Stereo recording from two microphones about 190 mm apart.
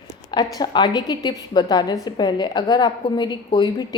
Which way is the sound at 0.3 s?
20° left (ahead or behind).